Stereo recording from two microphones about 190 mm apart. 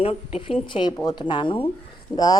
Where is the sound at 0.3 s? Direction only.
30° left (ahead or behind).